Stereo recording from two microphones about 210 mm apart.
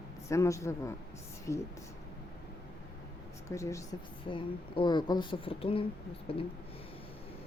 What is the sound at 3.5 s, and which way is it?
A man's voice, 15° left (ahead or behind).